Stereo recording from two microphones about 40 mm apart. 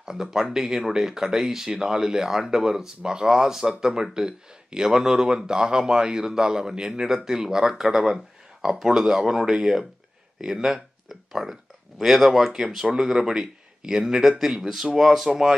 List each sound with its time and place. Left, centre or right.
0.0 s speech: centre
12.8 s speech: centre